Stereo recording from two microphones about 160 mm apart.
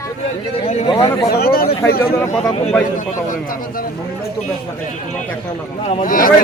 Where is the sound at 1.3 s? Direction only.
75° left (ahead or behind).